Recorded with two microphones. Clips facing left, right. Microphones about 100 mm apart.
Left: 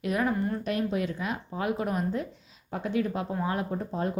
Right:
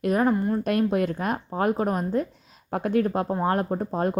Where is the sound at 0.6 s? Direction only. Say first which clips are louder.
Right 6 dB; 55° right (ahead or behind).